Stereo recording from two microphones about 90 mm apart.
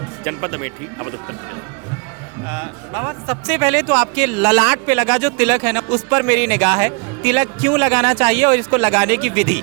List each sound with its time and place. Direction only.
0.3 s speech: 25° right (ahead or behind)
2.4 s speech: 25° right (ahead or behind)